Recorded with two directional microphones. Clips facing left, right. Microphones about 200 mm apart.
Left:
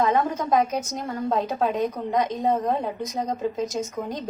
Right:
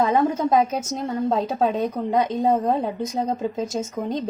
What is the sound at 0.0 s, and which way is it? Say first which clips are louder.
A woman's voice: right 3 dB; 30° right (ahead or behind).